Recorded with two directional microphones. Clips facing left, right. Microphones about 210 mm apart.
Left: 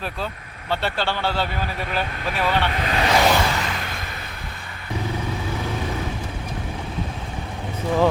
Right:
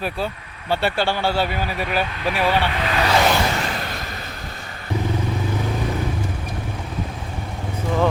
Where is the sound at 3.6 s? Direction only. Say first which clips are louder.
Right 2 dB; 45° right (ahead or behind).